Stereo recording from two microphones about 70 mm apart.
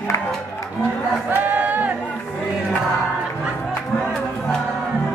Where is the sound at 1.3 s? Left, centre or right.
Right.